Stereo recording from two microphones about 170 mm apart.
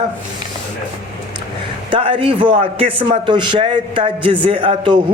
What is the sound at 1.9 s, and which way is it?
A man's voice, 30° right (ahead or behind).